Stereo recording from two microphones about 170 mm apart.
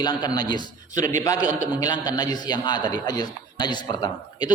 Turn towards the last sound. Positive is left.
turn(degrees=25)  # may be behind; listen again after turning